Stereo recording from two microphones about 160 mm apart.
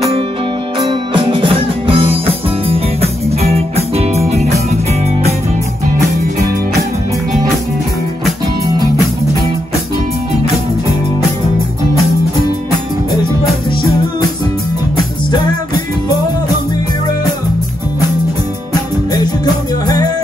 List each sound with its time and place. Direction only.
0.7 s music: 35° right (ahead or behind)
19.1 s music: 25° left (ahead or behind)